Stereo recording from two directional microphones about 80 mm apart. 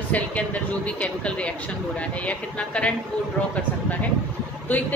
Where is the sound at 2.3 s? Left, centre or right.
Centre.